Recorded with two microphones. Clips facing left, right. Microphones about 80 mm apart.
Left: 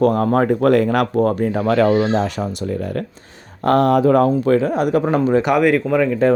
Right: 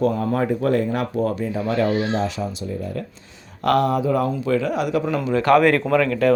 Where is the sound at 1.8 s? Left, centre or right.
Left.